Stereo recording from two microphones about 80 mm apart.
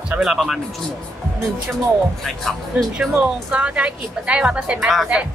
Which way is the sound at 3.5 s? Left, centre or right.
Centre.